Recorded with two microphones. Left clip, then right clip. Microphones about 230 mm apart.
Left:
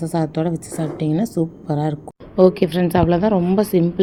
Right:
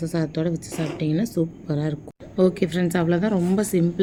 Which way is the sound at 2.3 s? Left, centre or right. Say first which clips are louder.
Left 7 dB; centre.